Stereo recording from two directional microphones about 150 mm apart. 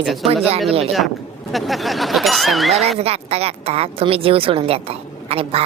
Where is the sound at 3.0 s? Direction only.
45° right (ahead or behind).